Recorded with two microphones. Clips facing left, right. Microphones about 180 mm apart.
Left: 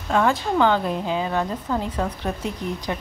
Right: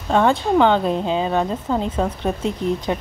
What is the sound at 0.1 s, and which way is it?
A woman's voice, 25° right (ahead or behind).